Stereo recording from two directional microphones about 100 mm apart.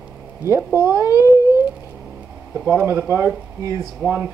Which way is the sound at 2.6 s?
25° right (ahead or behind).